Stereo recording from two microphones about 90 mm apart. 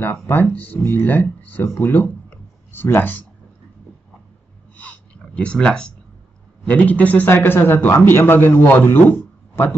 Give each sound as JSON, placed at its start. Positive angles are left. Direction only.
{"t": 0.0, "sound": "speech", "side_deg": 20}
{"t": 4.7, "sound": "a sound", "side_deg": 15}
{"t": 6.6, "sound": "a man's voice", "side_deg": 15}